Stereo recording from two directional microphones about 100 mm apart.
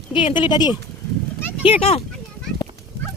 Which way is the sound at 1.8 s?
85° left.